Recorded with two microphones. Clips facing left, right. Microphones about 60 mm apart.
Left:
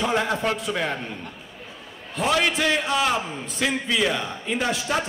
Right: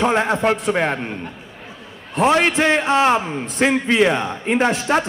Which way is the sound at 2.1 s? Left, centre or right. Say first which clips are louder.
Right 6 dB; right.